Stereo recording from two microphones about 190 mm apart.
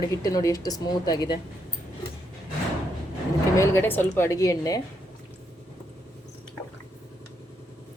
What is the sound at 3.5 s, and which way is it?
Speech, 15° left (ahead or behind).